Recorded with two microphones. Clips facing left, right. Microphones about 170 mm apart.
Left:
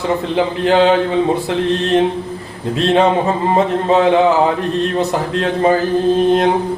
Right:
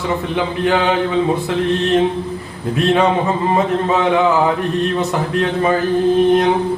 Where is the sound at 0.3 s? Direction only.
30° left (ahead or behind).